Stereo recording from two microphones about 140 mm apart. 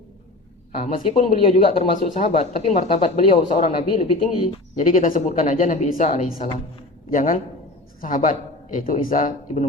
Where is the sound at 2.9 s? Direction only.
45° left (ahead or behind).